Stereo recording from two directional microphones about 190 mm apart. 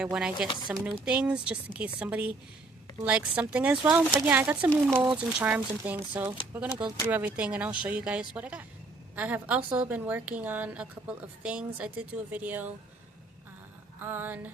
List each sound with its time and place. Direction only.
0.0 s speech: 5° right (ahead or behind)
0.3 s speech: 25° left (ahead or behind)
0.9 s a woman's voice: 5° right (ahead or behind)
14.0 s a woman's voice: 10° right (ahead or behind)